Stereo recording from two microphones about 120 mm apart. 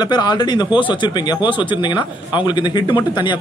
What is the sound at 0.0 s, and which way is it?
A man's voice, 35° left (ahead or behind).